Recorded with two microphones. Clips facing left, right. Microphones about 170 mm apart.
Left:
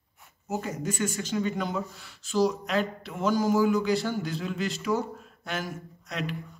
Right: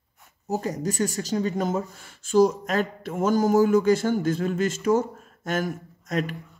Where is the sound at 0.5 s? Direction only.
35° right (ahead or behind).